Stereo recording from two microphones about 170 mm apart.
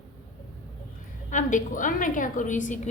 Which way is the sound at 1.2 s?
50° left (ahead or behind).